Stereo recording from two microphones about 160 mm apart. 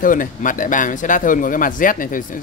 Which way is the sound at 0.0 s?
55° left (ahead or behind).